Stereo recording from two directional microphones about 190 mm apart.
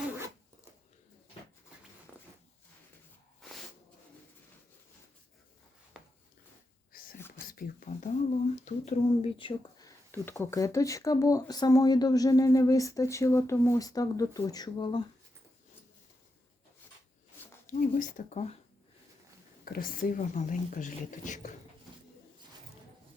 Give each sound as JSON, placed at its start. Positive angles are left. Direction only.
{"t": 3.4, "sound": "a sound", "side_deg": 0}
{"t": 6.0, "sound": "a sound", "side_deg": -5}
{"t": 7.2, "sound": "whispering", "side_deg": 10}
{"t": 7.5, "sound": "speech", "side_deg": 45}
{"t": 17.7, "sound": "speech", "side_deg": 45}
{"t": 19.6, "sound": "speech", "side_deg": 50}